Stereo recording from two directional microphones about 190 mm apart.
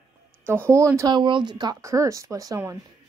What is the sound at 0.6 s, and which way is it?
Speech, 15° right (ahead or behind).